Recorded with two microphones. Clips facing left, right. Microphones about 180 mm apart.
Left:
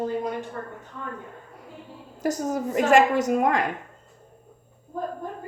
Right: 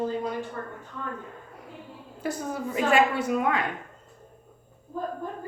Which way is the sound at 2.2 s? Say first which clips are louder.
Left 5 dB; 45° left (ahead or behind).